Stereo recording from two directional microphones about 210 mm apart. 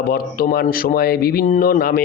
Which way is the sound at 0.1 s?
45° left (ahead or behind).